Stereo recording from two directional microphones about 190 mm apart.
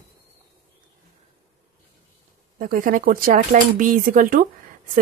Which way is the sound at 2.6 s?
45° right (ahead or behind).